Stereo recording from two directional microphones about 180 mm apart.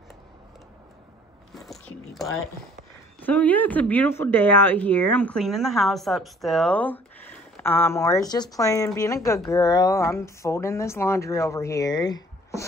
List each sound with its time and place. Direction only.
1.5 s biting: centre (ahead or behind)
3.2 s speech: 10° left (ahead or behind)